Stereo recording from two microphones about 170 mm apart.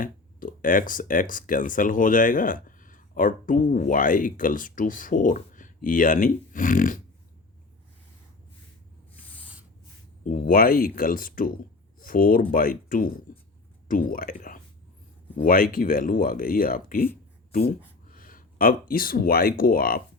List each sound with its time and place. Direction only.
0.0 s speech: 50° left (ahead or behind)
10.2 s speech: 55° left (ahead or behind)
18.1 s speech: 55° left (ahead or behind)